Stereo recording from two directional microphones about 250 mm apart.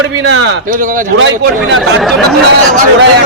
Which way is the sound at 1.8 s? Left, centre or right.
Centre.